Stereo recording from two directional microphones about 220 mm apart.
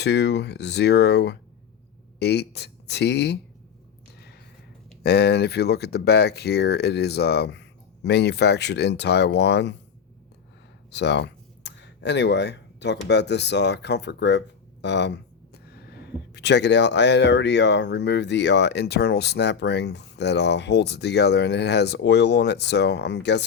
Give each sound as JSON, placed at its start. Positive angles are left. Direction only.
{"t": 0.0, "sound": "speech", "side_deg": 50}
{"t": 5.0, "sound": "speech", "side_deg": 50}
{"t": 10.9, "sound": "speech", "side_deg": 50}